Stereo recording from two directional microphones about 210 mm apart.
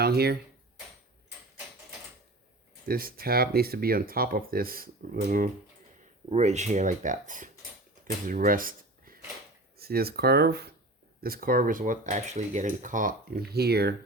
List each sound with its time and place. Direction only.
0.0 s speech: 50° right (ahead or behind)
2.8 s speech: 45° right (ahead or behind)
6.3 s speech: 35° right (ahead or behind); by 13.9 s 50° right (ahead or behind)